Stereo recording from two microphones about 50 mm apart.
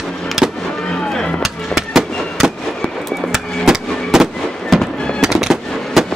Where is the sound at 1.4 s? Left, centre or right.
Centre.